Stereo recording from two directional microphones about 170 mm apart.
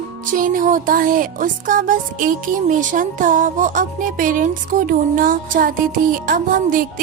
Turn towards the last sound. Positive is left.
turn(degrees=-55)  # may be behind; listen again after turning